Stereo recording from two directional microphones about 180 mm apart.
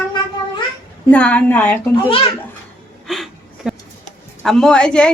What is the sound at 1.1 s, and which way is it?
Speech, 5° left (ahead or behind).